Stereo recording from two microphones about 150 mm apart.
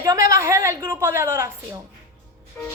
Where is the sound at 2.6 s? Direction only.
15° left (ahead or behind).